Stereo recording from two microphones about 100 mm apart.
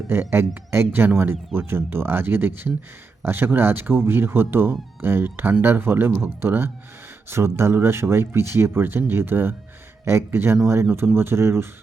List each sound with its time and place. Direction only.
0.1 s speech: 25° right (ahead or behind)